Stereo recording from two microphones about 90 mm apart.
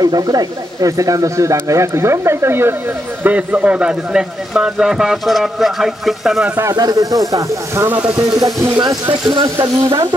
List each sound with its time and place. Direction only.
0.0 s speech: 45° right (ahead or behind); by 2.7 s 25° right (ahead or behind)
3.3 s a man's voice: 15° right (ahead or behind)
6.7 s speech: 45° right (ahead or behind)
7.8 s speech: 20° right (ahead or behind)
8.2 s speech: 45° right (ahead or behind)
9.1 s speech: 60° right (ahead or behind)